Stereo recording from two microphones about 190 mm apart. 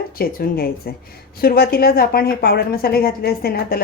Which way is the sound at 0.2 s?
55° left (ahead or behind).